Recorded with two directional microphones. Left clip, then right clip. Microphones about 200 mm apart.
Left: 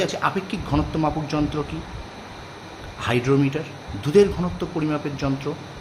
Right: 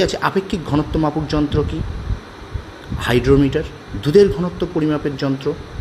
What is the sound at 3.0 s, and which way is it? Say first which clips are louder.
Speech: right 6 dB; 20° right (ahead or behind).